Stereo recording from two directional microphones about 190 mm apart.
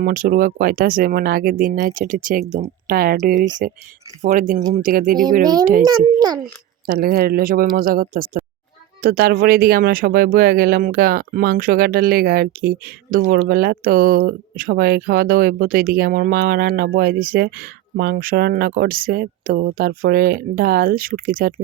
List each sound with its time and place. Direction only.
0.0 s speech: 45° right (ahead or behind)
5.8 s a child's voice: 20° right (ahead or behind)
6.8 s speech: 50° right (ahead or behind)